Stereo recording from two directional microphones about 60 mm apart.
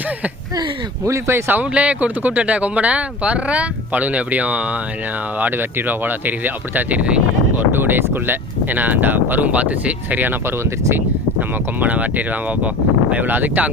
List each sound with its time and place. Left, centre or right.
1.0 s speech: right
1.7 s speech: right
7.5 s speech: right